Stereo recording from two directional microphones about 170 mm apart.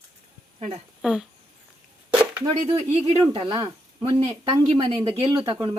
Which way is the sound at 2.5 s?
35° right (ahead or behind).